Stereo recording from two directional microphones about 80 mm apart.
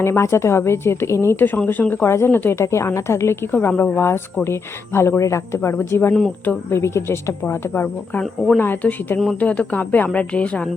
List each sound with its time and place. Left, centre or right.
0.0 s a woman's voice: left; by 10.7 s centre